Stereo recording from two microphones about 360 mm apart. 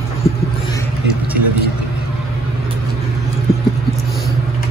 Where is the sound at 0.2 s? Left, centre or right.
Left.